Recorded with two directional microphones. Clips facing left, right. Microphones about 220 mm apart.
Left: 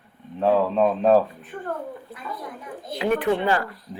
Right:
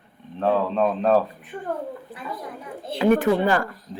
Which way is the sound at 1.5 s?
10° right (ahead or behind).